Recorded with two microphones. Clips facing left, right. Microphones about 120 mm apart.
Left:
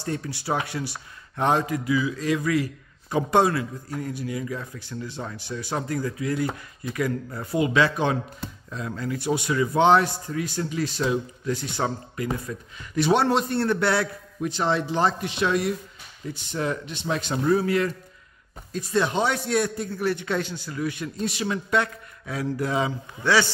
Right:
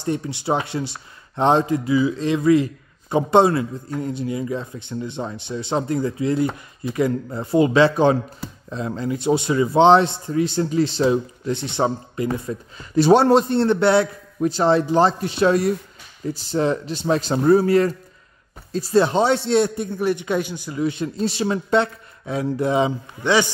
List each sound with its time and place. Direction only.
0.0 s speech: 20° right (ahead or behind)
14.4 s a man's voice: 35° right (ahead or behind); by 23.5 s 20° right (ahead or behind)